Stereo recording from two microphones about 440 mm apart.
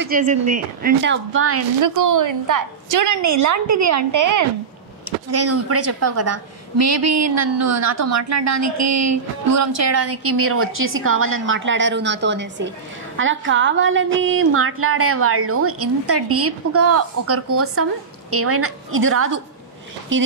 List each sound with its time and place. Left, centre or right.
0.0 s a woman's voice: centre
1.8 s a woman's voice: right